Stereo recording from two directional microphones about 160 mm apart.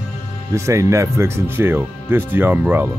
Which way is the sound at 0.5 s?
20° right (ahead or behind).